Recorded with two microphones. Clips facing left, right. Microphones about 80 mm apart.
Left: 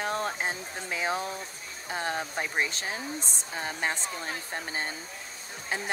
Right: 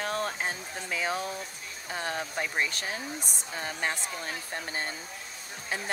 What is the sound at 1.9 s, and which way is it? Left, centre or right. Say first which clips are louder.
Speech: left 2 dB; left.